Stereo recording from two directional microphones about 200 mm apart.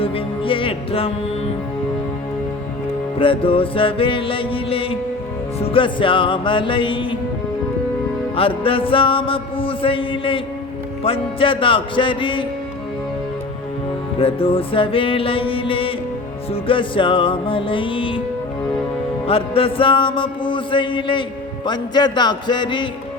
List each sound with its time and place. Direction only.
0.0 s music: 25° left (ahead or behind)
3.2 s music: 25° left (ahead or behind)
8.4 s music: 25° left (ahead or behind)
14.2 s music: 30° left (ahead or behind)
19.3 s music: 30° left (ahead or behind)